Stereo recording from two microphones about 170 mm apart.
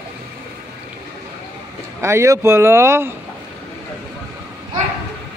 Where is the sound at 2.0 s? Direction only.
15° right (ahead or behind).